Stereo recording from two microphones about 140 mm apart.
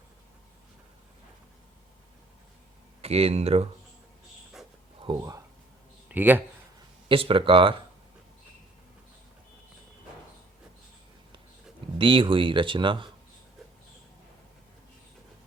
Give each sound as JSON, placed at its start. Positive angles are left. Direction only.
{"t": 3.0, "sound": "speech", "side_deg": -45}
{"t": 5.1, "sound": "speech", "side_deg": -40}
{"t": 6.1, "sound": "speech", "side_deg": -15}
{"t": 7.1, "sound": "speech", "side_deg": -40}
{"t": 11.9, "sound": "speech", "side_deg": -35}